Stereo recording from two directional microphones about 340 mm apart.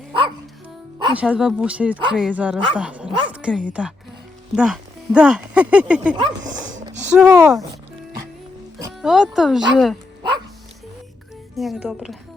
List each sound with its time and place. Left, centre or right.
1.0 s speech: centre
6.1 s speech: centre
8.8 s speech: centre
11.5 s speech: centre